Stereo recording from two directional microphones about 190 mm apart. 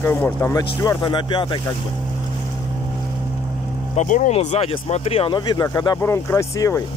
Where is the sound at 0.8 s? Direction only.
25° left (ahead or behind).